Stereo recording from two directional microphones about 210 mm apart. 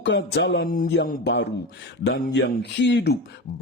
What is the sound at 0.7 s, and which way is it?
Speech, 45° left (ahead or behind).